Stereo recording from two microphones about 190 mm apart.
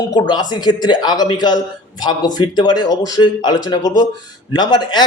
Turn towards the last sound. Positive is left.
turn(degrees=25)  # may be behind; listen again after turning